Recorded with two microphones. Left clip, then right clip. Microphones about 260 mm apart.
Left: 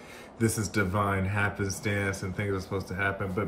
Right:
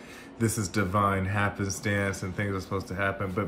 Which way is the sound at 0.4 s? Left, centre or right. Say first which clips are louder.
Left 1 dB; centre.